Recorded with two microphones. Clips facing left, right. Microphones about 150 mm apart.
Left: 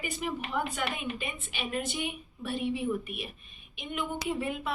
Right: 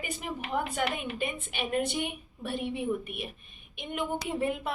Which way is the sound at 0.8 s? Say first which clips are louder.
Right 3 dB; 55° right (ahead or behind).